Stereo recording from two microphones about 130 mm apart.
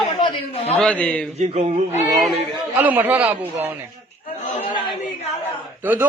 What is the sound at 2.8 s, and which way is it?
Speech, 15° right (ahead or behind).